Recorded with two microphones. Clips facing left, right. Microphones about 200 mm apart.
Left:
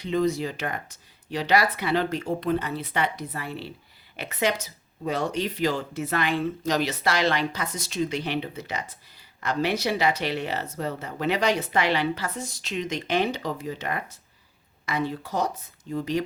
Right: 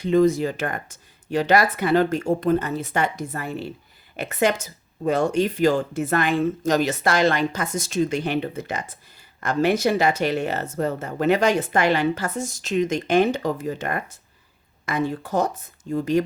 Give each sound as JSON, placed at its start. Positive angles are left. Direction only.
{"t": 0.0, "sound": "speech", "side_deg": -45}